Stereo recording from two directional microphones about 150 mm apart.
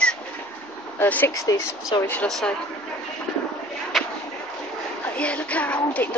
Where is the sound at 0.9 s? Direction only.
10° left (ahead or behind).